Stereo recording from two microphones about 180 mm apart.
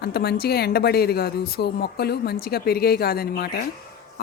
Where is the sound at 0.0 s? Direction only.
60° left (ahead or behind).